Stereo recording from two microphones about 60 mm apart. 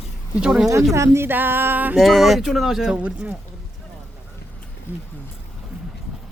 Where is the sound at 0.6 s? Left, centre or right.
Right.